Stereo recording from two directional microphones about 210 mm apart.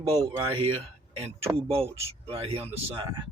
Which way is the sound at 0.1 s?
30° right (ahead or behind).